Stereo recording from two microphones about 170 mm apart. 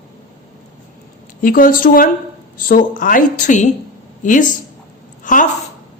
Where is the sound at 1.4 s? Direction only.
55° left (ahead or behind).